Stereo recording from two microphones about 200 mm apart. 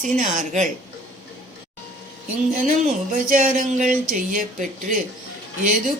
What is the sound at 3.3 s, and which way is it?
A woman's voice, 40° right (ahead or behind).